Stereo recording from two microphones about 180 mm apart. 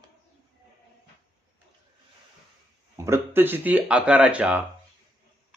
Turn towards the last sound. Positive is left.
turn(degrees=-10)  # may be behind; listen again after turning